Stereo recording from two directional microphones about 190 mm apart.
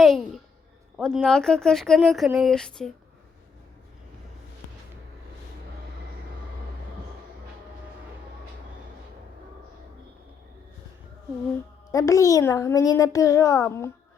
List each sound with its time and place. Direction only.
0.0 s a sound: centre (ahead or behind)
0.9 s speech: centre (ahead or behind)
11.9 s a child's voice: 15° left (ahead or behind)